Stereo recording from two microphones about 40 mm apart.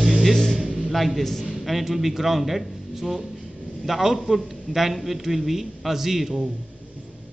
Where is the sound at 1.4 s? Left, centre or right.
Centre.